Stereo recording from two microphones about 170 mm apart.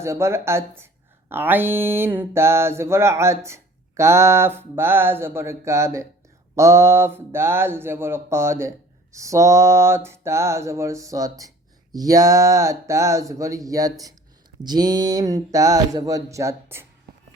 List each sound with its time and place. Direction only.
0.0 s mantra: 15° right (ahead or behind)
14.6 s speech: 25° right (ahead or behind)